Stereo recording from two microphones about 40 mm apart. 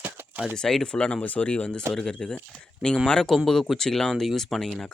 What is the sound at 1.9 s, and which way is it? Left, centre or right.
Speech, centre.